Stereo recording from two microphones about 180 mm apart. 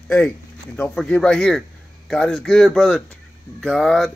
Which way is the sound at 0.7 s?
5° left (ahead or behind).